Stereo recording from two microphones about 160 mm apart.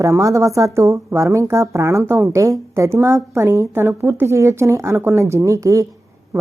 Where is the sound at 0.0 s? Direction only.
20° right (ahead or behind).